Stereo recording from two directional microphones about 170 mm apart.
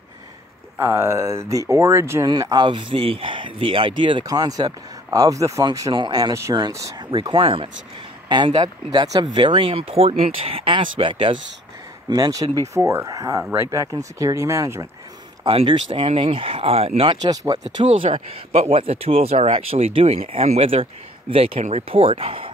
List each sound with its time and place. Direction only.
0.7 s speech: 15° right (ahead or behind); by 11.3 s 30° right (ahead or behind)
12.1 s speech: 20° right (ahead or behind)
15.4 s speech: 30° right (ahead or behind)